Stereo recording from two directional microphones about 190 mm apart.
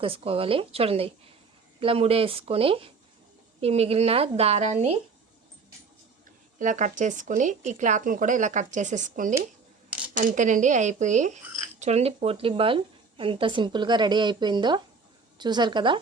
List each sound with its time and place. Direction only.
0.0 s a woman's voice: 30° right (ahead or behind)
6.6 s a woman's voice: 40° right (ahead or behind); by 16.0 s 25° right (ahead or behind)